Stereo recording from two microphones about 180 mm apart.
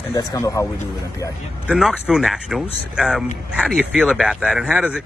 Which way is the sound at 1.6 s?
Centre (ahead or behind).